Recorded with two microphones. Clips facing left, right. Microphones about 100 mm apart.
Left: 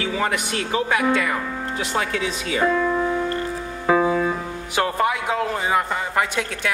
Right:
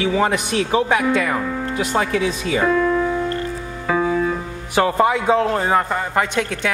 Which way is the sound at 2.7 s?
15° left (ahead or behind).